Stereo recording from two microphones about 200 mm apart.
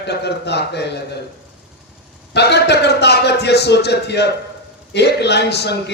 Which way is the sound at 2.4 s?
55° left (ahead or behind).